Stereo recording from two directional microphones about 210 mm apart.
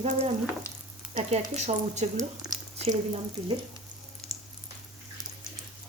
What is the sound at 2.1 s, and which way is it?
Speech, 15° right (ahead or behind).